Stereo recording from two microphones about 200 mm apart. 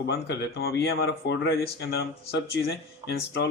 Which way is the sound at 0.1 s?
55° left (ahead or behind).